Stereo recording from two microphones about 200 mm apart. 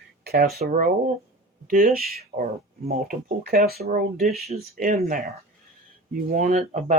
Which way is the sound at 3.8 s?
40° right (ahead or behind).